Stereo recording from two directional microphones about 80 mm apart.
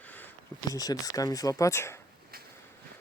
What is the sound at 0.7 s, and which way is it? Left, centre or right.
Speech, left.